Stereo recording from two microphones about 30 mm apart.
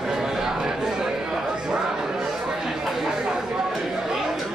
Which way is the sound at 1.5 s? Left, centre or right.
Right.